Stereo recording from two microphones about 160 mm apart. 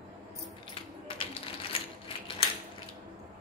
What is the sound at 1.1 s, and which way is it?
Typewriter, 35° left (ahead or behind).